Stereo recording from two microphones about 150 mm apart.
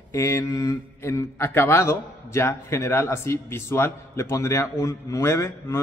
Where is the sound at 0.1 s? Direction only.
20° left (ahead or behind).